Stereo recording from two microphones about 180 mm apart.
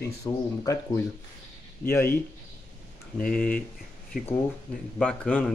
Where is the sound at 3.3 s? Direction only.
5° left (ahead or behind).